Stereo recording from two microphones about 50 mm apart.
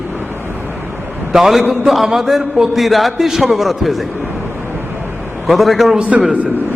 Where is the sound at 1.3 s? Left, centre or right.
Centre.